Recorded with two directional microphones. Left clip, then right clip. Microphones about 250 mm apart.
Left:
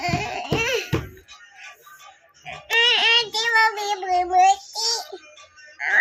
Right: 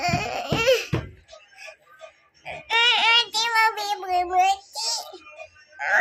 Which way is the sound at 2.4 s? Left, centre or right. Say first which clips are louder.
Left 1 dB; centre.